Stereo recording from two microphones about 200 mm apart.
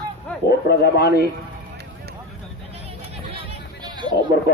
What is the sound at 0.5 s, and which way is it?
Speech, 55° left (ahead or behind).